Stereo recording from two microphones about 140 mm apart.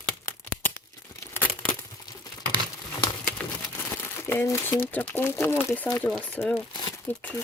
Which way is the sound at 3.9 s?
15° left (ahead or behind).